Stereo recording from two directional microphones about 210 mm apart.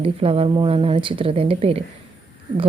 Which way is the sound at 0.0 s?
25° right (ahead or behind).